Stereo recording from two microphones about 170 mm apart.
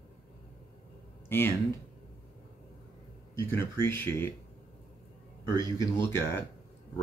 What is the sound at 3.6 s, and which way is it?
Speech, 15° left (ahead or behind).